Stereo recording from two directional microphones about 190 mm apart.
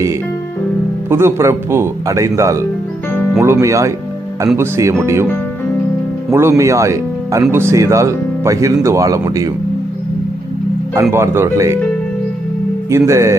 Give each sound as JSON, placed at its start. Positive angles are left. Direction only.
{"t": 1.1, "sound": "speech", "side_deg": -15}
{"t": 6.3, "sound": "speech", "side_deg": -15}
{"t": 11.1, "sound": "speech", "side_deg": -15}
{"t": 12.9, "sound": "speech", "side_deg": -15}